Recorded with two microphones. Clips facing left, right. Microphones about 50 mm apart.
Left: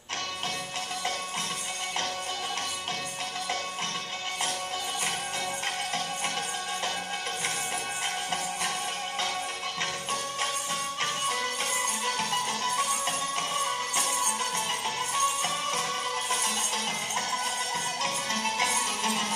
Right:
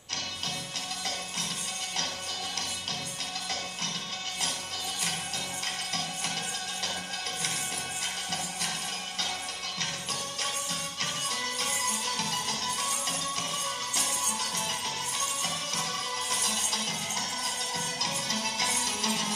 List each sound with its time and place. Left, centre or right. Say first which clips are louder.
11.0 s music: left 4 dB; left
15.4 s music: left 4 dB; left